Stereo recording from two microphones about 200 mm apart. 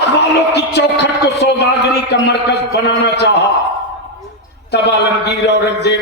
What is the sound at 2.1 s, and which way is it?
A man's voice, 55° left (ahead or behind).